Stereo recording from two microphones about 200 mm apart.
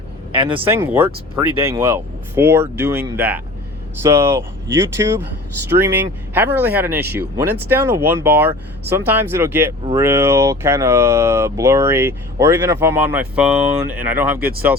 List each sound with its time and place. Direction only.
0.6 s speech: 10° right (ahead or behind)
14.3 s speech: 50° right (ahead or behind)